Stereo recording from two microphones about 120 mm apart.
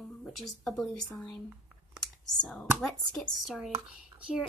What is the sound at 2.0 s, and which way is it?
Computer keyboard, 5° left (ahead or behind).